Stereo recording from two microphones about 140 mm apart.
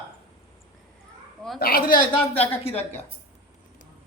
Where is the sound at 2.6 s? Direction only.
50° left (ahead or behind).